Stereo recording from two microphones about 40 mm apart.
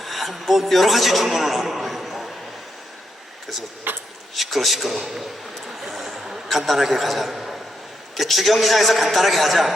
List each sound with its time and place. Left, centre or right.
0.0 s a man's voice: centre
3.9 s speech: right
4.4 s a sound: centre
6.2 s a man's voice: centre
7.3 s a sound: centre
8.1 s a man's voice: centre